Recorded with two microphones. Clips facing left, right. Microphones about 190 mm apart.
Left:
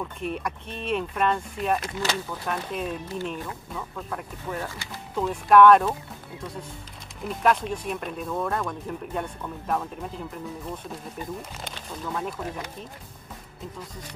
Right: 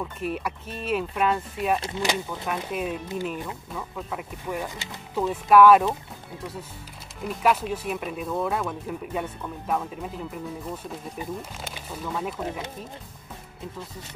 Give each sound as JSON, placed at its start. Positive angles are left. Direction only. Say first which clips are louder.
{"t": 0.0, "sound": "speech", "louder": "right 1 dB", "side_deg": -5}
{"t": 2.0, "sound": "speech", "louder": "right 2 dB", "side_deg": -15}
{"t": 7.2, "sound": "speech", "louder": "even", "side_deg": -5}
{"t": 11.1, "sound": "speech", "louder": "right 1 dB", "side_deg": -10}